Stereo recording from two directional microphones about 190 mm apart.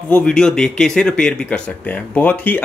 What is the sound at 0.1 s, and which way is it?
Speech, 5° left (ahead or behind).